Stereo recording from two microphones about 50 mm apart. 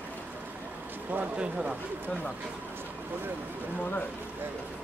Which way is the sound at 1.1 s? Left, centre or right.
Right.